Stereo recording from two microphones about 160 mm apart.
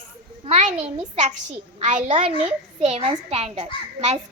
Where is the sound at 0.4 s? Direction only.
40° right (ahead or behind).